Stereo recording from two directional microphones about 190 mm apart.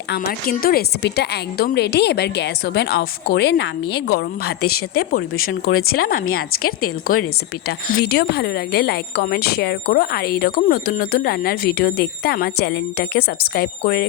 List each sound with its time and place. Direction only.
0.1 s a woman's voice: 50° left (ahead or behind)